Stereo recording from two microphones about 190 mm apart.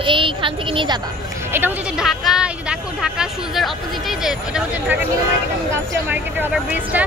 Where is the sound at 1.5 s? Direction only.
5° right (ahead or behind).